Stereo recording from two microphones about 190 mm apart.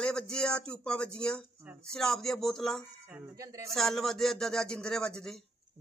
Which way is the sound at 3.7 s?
Centre (ahead or behind).